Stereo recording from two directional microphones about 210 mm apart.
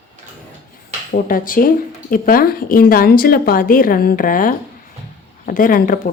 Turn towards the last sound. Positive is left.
turn(degrees=40)  # may be behind; listen again after turning